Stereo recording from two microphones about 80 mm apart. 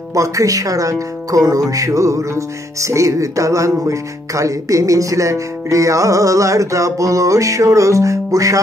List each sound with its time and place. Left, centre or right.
0.1 s speech: right